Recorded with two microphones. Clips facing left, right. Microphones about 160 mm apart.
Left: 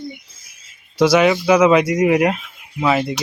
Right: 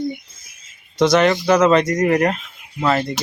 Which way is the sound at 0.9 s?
5° left (ahead or behind).